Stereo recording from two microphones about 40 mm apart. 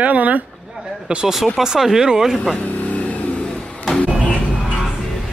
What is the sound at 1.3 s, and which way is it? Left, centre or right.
Speech, centre.